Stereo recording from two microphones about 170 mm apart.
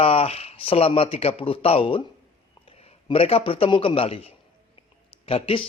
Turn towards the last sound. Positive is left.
turn(degrees=30)  # may be behind; listen again after turning